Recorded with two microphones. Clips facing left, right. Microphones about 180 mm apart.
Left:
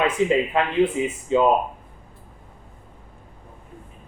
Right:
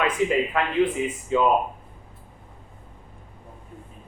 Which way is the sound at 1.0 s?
25° left (ahead or behind).